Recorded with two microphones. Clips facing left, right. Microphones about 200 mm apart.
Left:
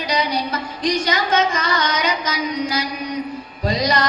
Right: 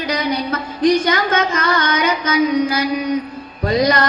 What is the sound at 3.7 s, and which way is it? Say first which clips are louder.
Music: right 4 dB; 55° right (ahead or behind).